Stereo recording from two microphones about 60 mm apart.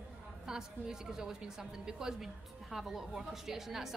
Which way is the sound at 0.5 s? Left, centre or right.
Centre.